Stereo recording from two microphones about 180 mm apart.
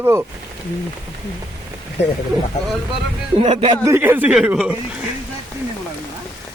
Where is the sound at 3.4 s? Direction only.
30° right (ahead or behind).